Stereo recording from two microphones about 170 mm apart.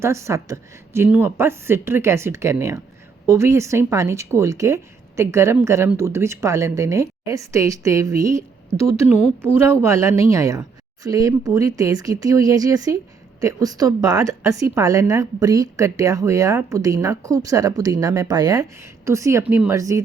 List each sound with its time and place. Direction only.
0.0 s a woman's voice: 15° right (ahead or behind)